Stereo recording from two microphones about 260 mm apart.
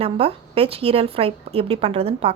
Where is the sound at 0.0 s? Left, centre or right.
Right.